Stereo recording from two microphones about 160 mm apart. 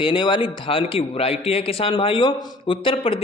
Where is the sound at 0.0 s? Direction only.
30° left (ahead or behind).